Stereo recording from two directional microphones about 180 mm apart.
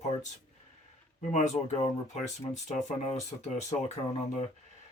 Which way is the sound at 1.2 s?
40° left (ahead or behind).